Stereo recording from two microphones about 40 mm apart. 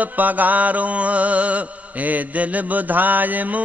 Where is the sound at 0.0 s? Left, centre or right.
Right.